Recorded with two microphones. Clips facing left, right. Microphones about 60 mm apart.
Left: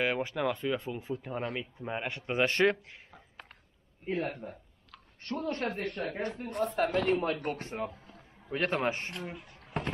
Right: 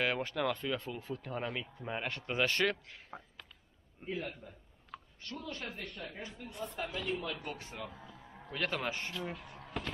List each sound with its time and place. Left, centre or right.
0.0 s a man's voice: centre
4.1 s a man's voice: left
5.2 s speech: left